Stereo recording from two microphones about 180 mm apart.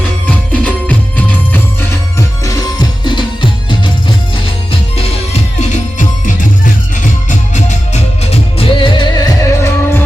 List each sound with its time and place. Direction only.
0.3 s music: 10° left (ahead or behind); by 3.9 s 25° left (ahead or behind)
4.9 s music: 35° left (ahead or behind); by 10.0 s 15° left (ahead or behind)